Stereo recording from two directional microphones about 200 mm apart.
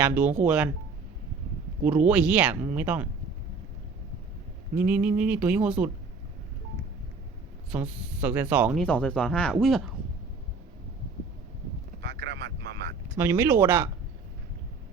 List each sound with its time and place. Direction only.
0.0 s speech: 10° right (ahead or behind)
1.8 s speech: 5° right (ahead or behind)
4.7 s speech: 10° right (ahead or behind)
7.7 s speech: 5° right (ahead or behind)
8.8 s speech: 5° left (ahead or behind)
12.0 s vehicle: 60° right (ahead or behind)
13.1 s speech: 10° right (ahead or behind)